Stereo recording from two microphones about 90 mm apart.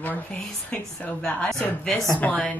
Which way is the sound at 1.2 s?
5° left (ahead or behind).